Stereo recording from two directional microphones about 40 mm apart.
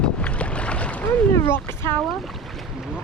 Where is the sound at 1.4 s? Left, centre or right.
Left.